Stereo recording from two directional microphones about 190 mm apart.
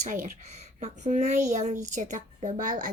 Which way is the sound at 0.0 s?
40° right (ahead or behind).